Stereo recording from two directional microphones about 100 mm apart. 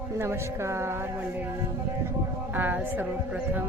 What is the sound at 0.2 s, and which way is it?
Speech, 25° right (ahead or behind).